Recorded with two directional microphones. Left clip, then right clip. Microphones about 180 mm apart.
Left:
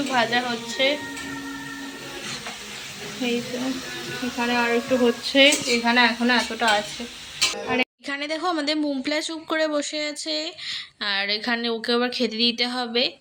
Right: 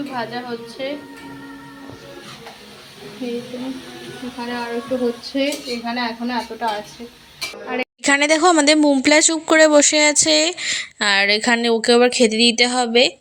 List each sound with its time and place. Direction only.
0.1 s speech: 5° left (ahead or behind)
4.4 s speech: 10° left (ahead or behind)
5.3 s speech: 5° right (ahead or behind)
7.7 s a woman's voice: 5° right (ahead or behind)
8.0 s speech: 50° right (ahead or behind)